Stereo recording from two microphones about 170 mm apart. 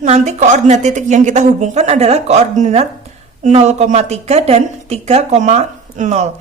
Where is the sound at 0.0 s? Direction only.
45° right (ahead or behind).